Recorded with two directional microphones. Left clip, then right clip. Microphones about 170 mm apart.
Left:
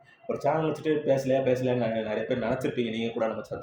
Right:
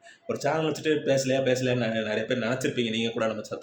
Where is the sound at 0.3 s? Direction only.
10° right (ahead or behind).